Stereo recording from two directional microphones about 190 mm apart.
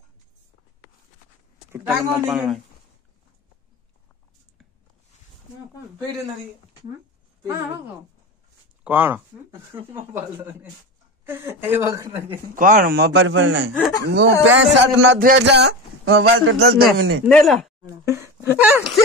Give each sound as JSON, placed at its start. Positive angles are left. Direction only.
{"t": 1.7, "sound": "speech", "side_deg": -15}
{"t": 2.3, "sound": "speech", "side_deg": 0}
{"t": 8.8, "sound": "speech", "side_deg": -10}
{"t": 12.5, "sound": "a man's voice", "side_deg": -45}
{"t": 15.1, "sound": "speech", "side_deg": -60}
{"t": 17.3, "sound": "speech", "side_deg": 0}
{"t": 17.8, "sound": "speech", "side_deg": -15}